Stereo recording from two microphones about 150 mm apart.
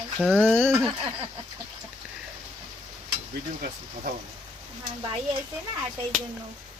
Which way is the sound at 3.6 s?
60° right (ahead or behind).